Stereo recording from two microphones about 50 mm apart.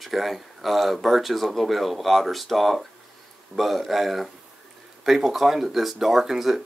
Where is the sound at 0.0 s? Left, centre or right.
Centre.